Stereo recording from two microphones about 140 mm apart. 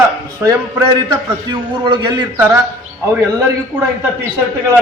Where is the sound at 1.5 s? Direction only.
30° right (ahead or behind).